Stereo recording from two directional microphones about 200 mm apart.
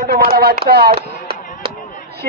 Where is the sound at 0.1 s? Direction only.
50° right (ahead or behind).